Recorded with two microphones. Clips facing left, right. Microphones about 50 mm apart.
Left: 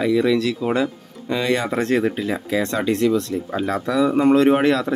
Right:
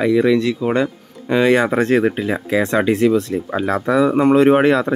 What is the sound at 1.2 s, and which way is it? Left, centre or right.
Speech, right.